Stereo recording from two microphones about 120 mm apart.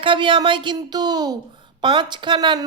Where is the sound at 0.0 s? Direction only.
45° right (ahead or behind).